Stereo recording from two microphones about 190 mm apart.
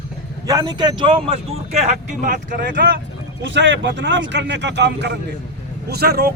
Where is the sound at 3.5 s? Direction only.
70° right (ahead or behind).